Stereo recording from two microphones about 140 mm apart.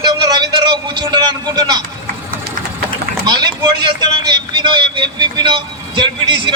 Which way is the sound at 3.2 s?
30° right (ahead or behind).